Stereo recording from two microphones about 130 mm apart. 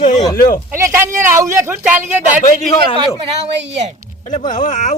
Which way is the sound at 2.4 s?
70° left (ahead or behind).